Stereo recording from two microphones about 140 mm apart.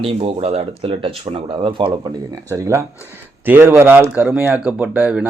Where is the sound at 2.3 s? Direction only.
25° right (ahead or behind).